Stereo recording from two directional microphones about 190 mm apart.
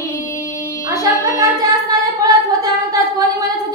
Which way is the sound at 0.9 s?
20° right (ahead or behind).